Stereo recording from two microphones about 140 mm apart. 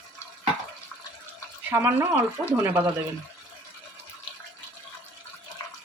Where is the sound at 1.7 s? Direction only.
15° right (ahead or behind).